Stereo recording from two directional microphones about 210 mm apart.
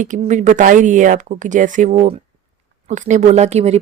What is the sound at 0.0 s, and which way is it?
Speech, 35° right (ahead or behind).